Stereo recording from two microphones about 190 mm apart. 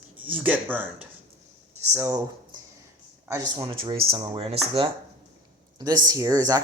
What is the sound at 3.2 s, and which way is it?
Speech, 15° right (ahead or behind).